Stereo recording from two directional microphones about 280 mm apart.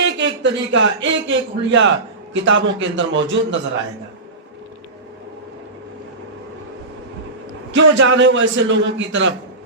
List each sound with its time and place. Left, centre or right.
0.0 s a man's voice: right
7.7 s a man's voice: right